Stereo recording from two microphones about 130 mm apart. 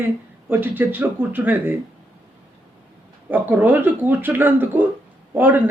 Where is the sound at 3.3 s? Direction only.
15° right (ahead or behind).